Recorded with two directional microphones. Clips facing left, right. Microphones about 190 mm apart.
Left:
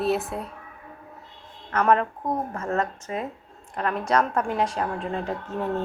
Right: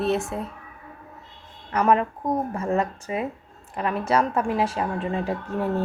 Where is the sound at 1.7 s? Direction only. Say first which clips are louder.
Right 1 dB; 5° right (ahead or behind).